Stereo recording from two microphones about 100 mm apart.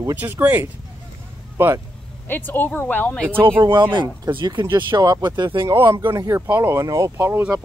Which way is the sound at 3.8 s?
50° right (ahead or behind).